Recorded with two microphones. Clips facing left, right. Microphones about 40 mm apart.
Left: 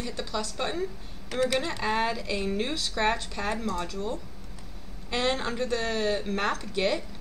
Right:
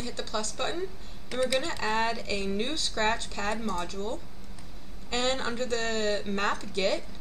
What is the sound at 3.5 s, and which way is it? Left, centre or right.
Speech, centre.